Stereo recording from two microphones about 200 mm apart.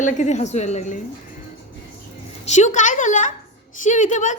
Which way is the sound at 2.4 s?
40° left (ahead or behind).